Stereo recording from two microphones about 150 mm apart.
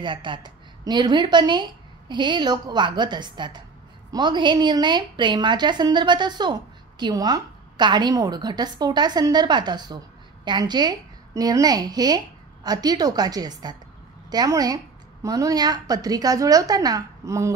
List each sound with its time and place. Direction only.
0.0 s a woman's voice: 30° right (ahead or behind)